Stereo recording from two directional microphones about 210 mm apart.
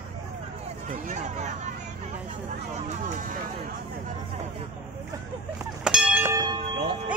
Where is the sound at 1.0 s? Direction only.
35° right (ahead or behind).